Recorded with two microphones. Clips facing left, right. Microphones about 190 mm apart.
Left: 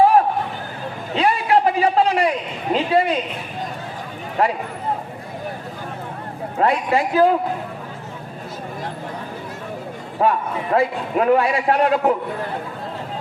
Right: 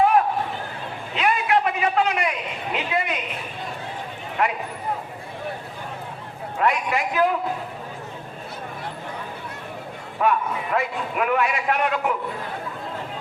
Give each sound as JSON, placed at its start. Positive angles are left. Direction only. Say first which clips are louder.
{"t": 1.1, "sound": "a sound", "louder": "left 4 dB", "side_deg": 30}
{"t": 2.7, "sound": "a woman's voice", "louder": "left 8 dB", "side_deg": 30}
{"t": 4.4, "sound": "a man's voice", "louder": "left 4 dB", "side_deg": 35}
{"t": 6.6, "sound": "a man's voice", "louder": "left 4 dB", "side_deg": 30}
{"t": 10.2, "sound": "a man's voice", "louder": "left 3 dB", "side_deg": 30}